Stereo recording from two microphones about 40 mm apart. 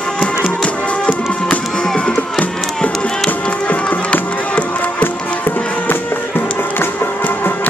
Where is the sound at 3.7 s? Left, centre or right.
Left.